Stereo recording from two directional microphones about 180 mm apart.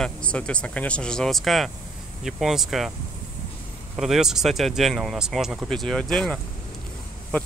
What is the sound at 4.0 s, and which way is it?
Speech, centre (ahead or behind).